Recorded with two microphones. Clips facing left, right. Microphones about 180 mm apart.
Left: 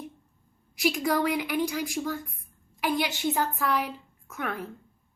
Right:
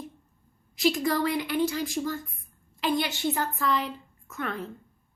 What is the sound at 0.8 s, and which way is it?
A woman's voice, 15° left (ahead or behind).